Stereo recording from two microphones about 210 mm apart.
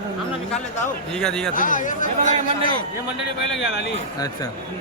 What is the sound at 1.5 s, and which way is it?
Speech, 40° left (ahead or behind).